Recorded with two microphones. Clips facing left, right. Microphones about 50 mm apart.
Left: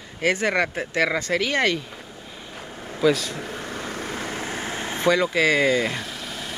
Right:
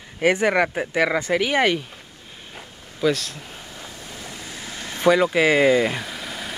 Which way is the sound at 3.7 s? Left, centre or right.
Left.